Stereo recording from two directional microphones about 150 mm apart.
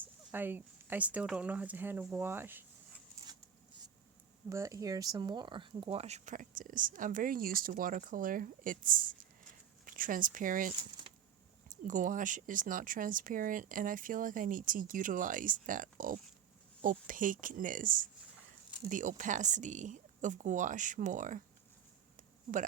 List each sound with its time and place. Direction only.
0.0 s speech: 10° right (ahead or behind)
4.4 s speech: 20° right (ahead or behind); by 10.7 s 65° right (ahead or behind)
11.7 s speech: 60° right (ahead or behind)